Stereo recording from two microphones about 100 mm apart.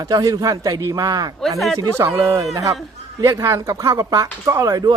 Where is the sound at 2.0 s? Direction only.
30° right (ahead or behind).